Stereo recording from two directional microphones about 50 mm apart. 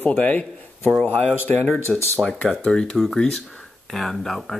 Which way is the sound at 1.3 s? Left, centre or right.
Left.